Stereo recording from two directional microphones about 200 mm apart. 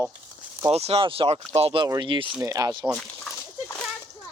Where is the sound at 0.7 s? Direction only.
30° right (ahead or behind).